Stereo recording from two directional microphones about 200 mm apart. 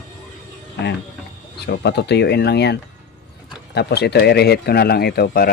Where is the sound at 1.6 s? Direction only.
55° left (ahead or behind).